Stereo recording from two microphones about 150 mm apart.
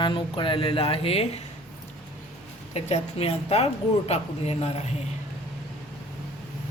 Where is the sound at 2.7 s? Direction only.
45° left (ahead or behind).